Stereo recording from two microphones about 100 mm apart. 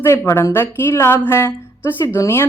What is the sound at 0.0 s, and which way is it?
A woman's voice, 25° left (ahead or behind).